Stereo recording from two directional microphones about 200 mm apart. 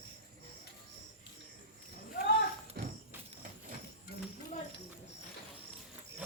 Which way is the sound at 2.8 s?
50° right (ahead or behind).